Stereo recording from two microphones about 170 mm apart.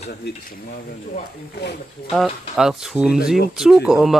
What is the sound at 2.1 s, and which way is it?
Speech, centre (ahead or behind).